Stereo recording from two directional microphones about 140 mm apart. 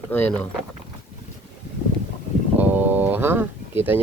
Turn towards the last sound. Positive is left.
turn(degrees=-15)  # may be behind; listen again after turning